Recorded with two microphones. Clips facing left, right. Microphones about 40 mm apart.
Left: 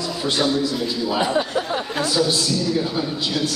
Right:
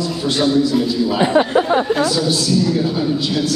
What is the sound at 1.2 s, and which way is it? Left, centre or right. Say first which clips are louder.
Speech: right 7 dB; right.